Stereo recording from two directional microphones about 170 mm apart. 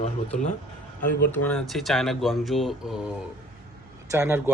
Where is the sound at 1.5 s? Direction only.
5° left (ahead or behind).